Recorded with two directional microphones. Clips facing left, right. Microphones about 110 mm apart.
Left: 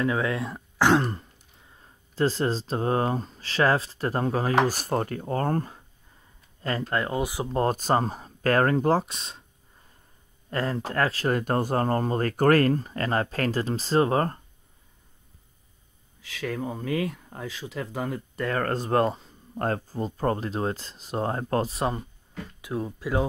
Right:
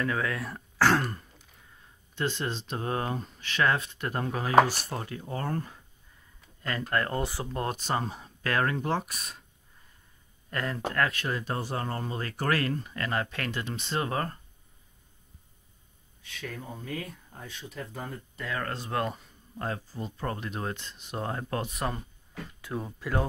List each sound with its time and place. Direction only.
0.0 s speech: 20° left (ahead or behind)
1.8 s speech: 35° left (ahead or behind)
6.6 s speech: 30° left (ahead or behind)
7.1 s speech: 10° left (ahead or behind)
7.5 s speech: 40° left (ahead or behind)
9.0 s speech: 25° left (ahead or behind)
10.5 s speech: 30° left (ahead or behind)
11.2 s speech: 50° left (ahead or behind)
16.2 s speech: 90° left
18.5 s speech: 45° left (ahead or behind)
19.5 s speech: 50° left (ahead or behind); by 22.0 s 25° left (ahead or behind)
22.6 s speech: 5° left (ahead or behind)